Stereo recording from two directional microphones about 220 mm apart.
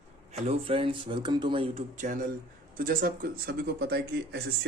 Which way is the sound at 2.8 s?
40° right (ahead or behind).